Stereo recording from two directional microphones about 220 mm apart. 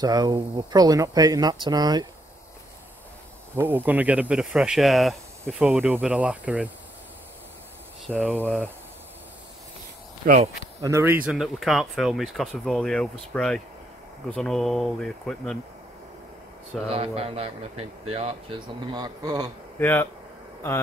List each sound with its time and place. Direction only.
0.0 s speech: 20° right (ahead or behind)
3.5 s speech: 10° right (ahead or behind)
8.2 s speech: 10° right (ahead or behind)
10.2 s speech: 35° right (ahead or behind)
10.8 s speech: 15° right (ahead or behind); by 15.6 s 5° left (ahead or behind)
16.9 s a man's voice: 25° right (ahead or behind)
19.8 s speech: 10° left (ahead or behind)